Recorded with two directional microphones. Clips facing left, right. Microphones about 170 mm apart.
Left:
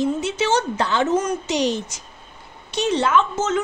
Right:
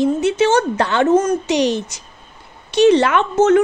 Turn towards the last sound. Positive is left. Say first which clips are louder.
# right 7 dB
turn(degrees=-60)  # may be behind; listen again after turning